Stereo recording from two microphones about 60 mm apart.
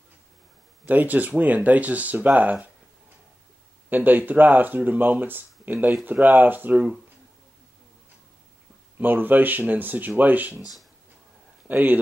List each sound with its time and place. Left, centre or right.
0.8 s speech: right
3.9 s speech: right
8.9 s speech: right
11.6 s speech: right